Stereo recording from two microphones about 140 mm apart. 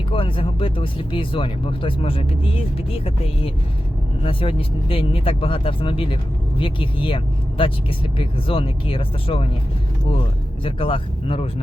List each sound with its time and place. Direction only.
0.1 s speech: 40° left (ahead or behind)
4.2 s speech: 40° left (ahead or behind)
8.2 s speech: 40° left (ahead or behind)
10.6 s speech: 40° left (ahead or behind)